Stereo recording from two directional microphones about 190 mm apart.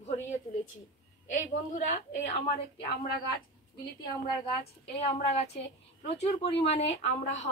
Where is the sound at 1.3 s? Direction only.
40° left (ahead or behind).